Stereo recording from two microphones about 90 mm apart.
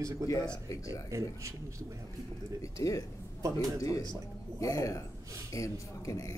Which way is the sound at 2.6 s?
40° left (ahead or behind).